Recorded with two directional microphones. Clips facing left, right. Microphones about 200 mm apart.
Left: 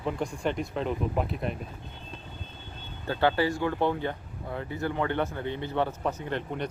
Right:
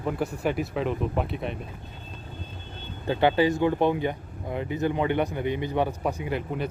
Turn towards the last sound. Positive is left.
turn(degrees=-5)  # may be behind; listen again after turning